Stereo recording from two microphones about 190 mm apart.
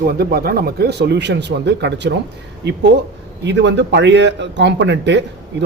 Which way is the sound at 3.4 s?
65° right (ahead or behind).